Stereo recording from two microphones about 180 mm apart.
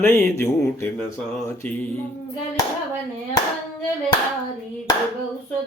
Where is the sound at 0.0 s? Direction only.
15° left (ahead or behind).